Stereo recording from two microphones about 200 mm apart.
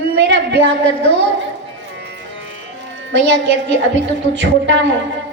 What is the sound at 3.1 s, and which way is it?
A woman's voice, 65° right (ahead or behind).